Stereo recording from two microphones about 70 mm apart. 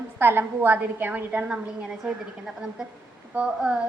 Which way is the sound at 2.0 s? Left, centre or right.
Centre.